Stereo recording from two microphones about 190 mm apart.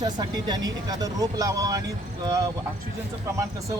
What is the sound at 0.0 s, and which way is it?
Speech, 20° right (ahead or behind).